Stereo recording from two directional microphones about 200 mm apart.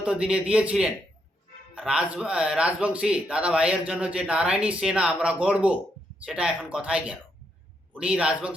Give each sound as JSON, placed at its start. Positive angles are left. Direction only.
{"t": 0.0, "sound": "speech", "side_deg": -5}